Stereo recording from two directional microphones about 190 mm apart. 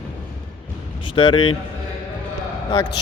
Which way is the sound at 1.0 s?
25° left (ahead or behind).